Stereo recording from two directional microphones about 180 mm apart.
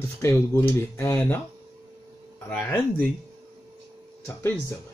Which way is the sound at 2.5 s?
10° left (ahead or behind).